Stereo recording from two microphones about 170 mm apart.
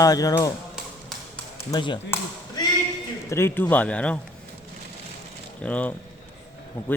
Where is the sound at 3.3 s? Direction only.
15° left (ahead or behind).